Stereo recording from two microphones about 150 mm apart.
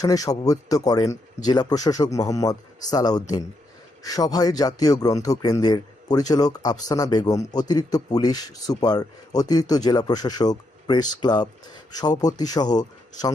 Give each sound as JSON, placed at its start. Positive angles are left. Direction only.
{"t": 0.0, "sound": "a man's voice", "side_deg": 25}